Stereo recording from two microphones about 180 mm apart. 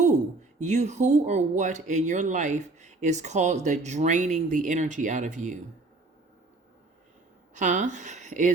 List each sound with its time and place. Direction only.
0.6 s speech: 40° right (ahead or behind)
7.5 s a woman's voice: 45° right (ahead or behind)